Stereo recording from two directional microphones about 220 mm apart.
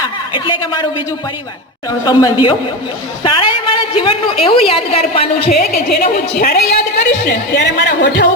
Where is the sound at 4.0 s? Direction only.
25° left (ahead or behind).